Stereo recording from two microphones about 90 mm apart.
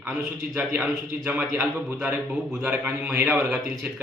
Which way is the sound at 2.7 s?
20° right (ahead or behind).